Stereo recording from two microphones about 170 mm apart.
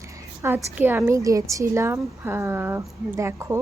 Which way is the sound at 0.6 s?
10° right (ahead or behind).